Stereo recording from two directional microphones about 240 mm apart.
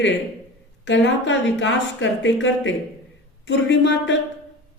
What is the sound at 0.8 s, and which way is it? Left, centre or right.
Speech, left.